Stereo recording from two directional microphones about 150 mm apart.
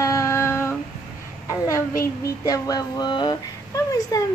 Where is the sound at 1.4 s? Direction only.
20° left (ahead or behind).